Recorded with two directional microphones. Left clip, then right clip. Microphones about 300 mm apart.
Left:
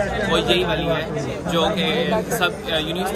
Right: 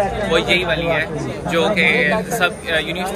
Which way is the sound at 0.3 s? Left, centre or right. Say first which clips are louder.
Right 2 dB; centre.